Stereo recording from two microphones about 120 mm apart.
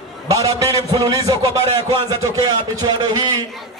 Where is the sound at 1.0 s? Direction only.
30° right (ahead or behind).